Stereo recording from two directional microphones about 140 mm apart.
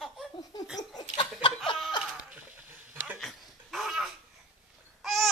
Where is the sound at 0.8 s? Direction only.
30° left (ahead or behind).